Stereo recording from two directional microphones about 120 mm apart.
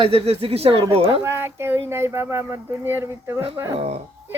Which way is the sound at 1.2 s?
20° right (ahead or behind).